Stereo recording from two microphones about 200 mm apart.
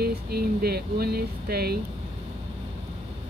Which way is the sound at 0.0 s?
50° right (ahead or behind).